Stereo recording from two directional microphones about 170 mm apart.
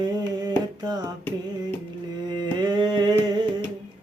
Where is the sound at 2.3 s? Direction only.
25° right (ahead or behind).